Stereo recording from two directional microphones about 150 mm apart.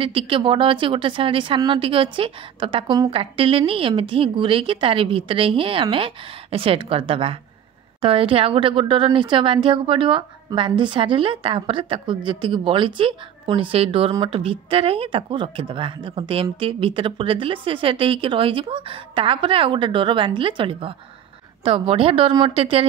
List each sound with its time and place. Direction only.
0.0 s speech: 35° right (ahead or behind)